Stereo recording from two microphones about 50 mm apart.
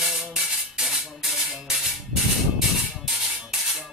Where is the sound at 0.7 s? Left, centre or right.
Centre.